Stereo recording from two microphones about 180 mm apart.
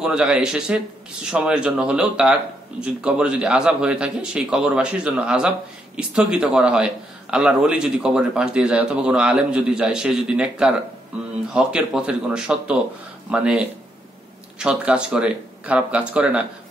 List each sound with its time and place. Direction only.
0.0 s a man's voice: 5° right (ahead or behind)